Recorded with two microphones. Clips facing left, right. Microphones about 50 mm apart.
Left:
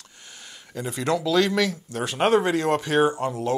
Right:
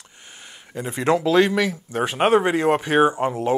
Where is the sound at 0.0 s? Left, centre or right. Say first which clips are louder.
Right 2 dB; right.